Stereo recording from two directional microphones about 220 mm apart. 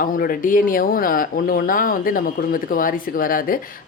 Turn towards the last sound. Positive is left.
turn(degrees=40)  # may be behind; listen again after turning